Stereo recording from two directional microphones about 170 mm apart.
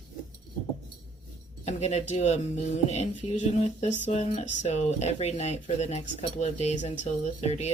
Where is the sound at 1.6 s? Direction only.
40° left (ahead or behind).